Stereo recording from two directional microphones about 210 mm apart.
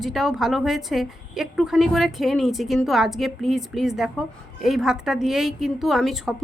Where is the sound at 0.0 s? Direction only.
Centre (ahead or behind).